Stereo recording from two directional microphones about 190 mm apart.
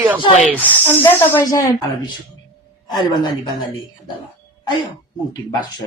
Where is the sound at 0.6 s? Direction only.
10° left (ahead or behind).